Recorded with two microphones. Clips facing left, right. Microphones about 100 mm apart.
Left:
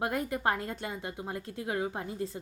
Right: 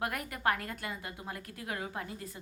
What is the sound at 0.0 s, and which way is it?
A woman's voice, 25° left (ahead or behind).